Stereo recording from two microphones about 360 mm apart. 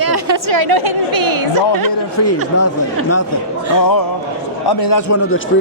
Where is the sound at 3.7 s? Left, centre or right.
Left.